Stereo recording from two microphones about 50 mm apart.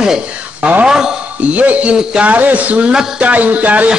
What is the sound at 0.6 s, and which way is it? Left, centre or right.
Speech, right.